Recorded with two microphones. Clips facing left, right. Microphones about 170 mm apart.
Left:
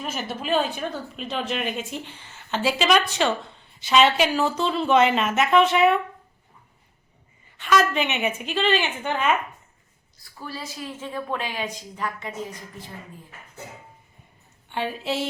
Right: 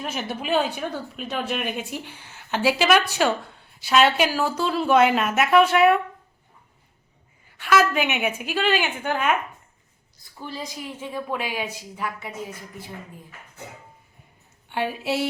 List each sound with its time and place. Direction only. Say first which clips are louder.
0.1 s speech: even; 10° right (ahead or behind)
7.6 s speech: right 1 dB; 5° right (ahead or behind)
10.3 s speech: right 1 dB; 20° right (ahead or behind)
14.7 s speech: right 2 dB; 10° right (ahead or behind)